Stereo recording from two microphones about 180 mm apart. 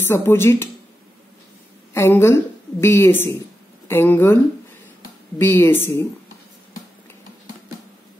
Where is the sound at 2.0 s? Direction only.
15° left (ahead or behind).